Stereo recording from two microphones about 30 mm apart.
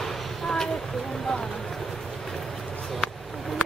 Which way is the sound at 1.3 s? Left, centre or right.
Centre.